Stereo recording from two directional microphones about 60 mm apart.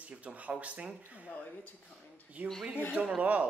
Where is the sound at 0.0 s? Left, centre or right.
Right.